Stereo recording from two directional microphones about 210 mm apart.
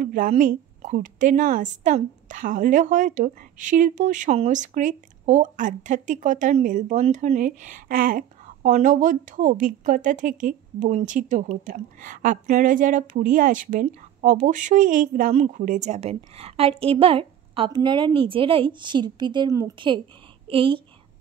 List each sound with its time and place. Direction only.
0.0 s a woman's voice: 40° right (ahead or behind); by 20.8 s 25° right (ahead or behind)